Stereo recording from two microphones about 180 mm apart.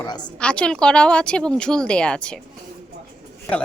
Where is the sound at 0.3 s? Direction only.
5° left (ahead or behind).